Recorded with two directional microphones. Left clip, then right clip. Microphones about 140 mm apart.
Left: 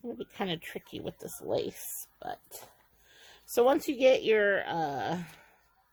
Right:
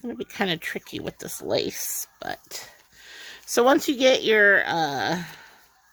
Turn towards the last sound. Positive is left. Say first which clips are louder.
# right 7 dB
turn(degrees=-40)  # may be behind; listen again after turning